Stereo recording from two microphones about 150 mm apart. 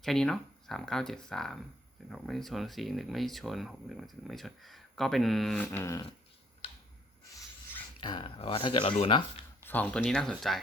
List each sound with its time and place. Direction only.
0.0 s speech: 5° left (ahead or behind)
5.7 s dog: 20° left (ahead or behind)
8.0 s speech: 35° left (ahead or behind)
9.6 s speech: 10° left (ahead or behind)